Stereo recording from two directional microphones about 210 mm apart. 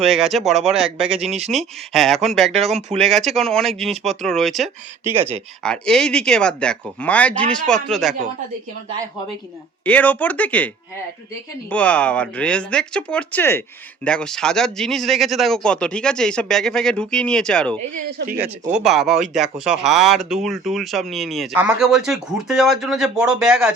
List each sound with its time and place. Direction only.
0.0 s speech: centre (ahead or behind)
5.0 s speech: 10° right (ahead or behind)
5.6 s speech: 5° left (ahead or behind)
9.8 s speech: 5° left (ahead or behind)
11.7 s speech: 5° left (ahead or behind)
18.2 s speech: 50° right (ahead or behind)
18.7 s speech: centre (ahead or behind)